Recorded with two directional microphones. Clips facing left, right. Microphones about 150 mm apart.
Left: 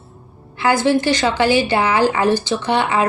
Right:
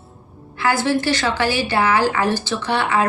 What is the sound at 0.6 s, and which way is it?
A woman's voice, 20° left (ahead or behind).